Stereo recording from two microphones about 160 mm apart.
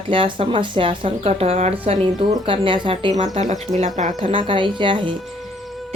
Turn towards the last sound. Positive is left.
turn(degrees=-30)  # may be behind; listen again after turning